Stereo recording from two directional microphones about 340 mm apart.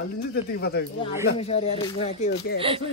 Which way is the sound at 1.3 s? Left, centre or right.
Centre.